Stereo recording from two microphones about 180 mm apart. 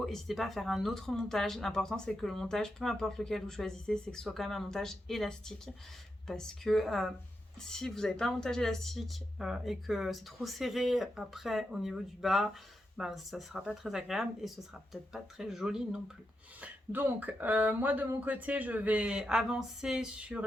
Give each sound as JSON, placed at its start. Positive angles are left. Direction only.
{"t": 0.0, "sound": "speech", "side_deg": 0}